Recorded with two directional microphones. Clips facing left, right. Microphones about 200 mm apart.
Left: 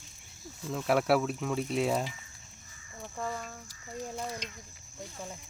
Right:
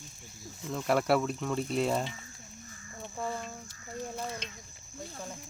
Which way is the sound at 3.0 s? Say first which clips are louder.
Right 1 dB; 5° right (ahead or behind).